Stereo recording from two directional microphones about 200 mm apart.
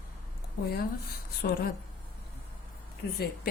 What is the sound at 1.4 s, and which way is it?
Speech, 50° left (ahead or behind).